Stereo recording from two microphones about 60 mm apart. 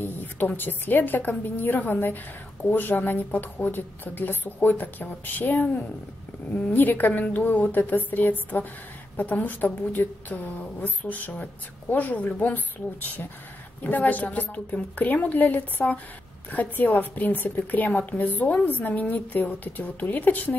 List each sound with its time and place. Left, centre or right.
0.6 s a woman's voice: left